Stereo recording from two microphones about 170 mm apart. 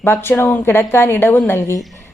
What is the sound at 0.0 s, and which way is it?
Speech, 15° left (ahead or behind).